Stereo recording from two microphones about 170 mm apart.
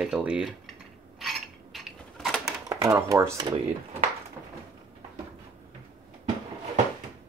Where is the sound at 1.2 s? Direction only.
Centre (ahead or behind).